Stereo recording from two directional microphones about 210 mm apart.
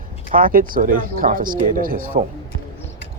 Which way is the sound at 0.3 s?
40° right (ahead or behind).